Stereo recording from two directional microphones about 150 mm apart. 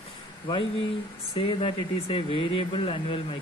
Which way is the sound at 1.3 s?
40° left (ahead or behind).